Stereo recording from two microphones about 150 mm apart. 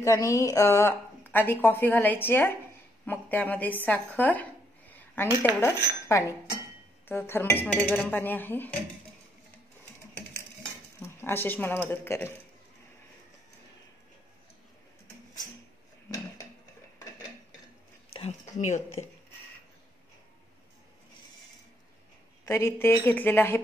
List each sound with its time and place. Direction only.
0.0 s a woman's voice: 20° left (ahead or behind)
11.0 s speech: 15° left (ahead or behind)
18.1 s speech: 45° left (ahead or behind)
22.4 s a woman's voice: 15° left (ahead or behind)